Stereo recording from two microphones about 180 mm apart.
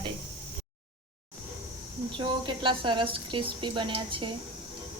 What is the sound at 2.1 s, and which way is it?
A woman's voice, 25° right (ahead or behind).